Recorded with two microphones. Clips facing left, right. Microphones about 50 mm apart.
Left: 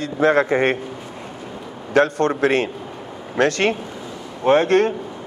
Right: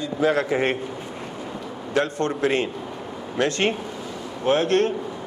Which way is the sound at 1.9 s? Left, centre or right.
Left.